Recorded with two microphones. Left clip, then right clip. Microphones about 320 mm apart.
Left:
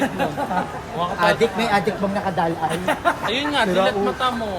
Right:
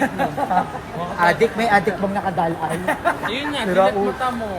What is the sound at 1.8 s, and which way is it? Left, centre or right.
Speech, centre.